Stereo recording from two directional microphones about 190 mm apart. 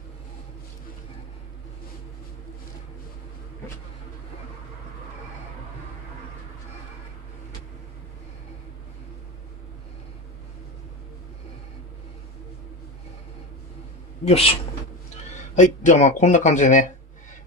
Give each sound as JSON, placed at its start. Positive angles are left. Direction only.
{"t": 14.2, "sound": "speech", "side_deg": 35}
{"t": 15.5, "sound": "speech", "side_deg": 40}